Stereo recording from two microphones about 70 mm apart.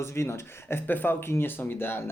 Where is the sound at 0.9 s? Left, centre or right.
Left.